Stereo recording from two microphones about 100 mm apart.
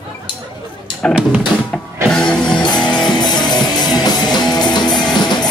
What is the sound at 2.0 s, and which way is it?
Music, 10° left (ahead or behind).